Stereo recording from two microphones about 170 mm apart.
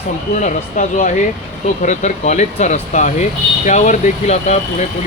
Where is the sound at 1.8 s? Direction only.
45° left (ahead or behind).